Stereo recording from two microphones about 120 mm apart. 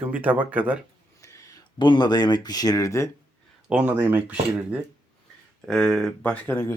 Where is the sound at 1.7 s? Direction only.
40° left (ahead or behind).